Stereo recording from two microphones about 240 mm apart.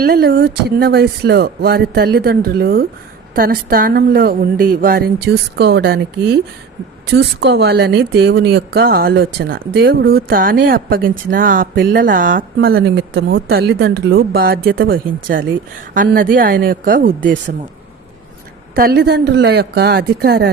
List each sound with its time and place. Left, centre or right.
0.0 s speech: right
18.7 s speech: right